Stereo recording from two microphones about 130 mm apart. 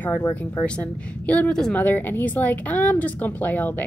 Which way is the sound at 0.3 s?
10° left (ahead or behind).